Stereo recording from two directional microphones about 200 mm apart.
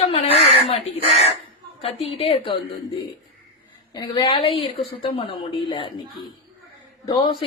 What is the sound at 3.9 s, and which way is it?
Speech, 25° left (ahead or behind).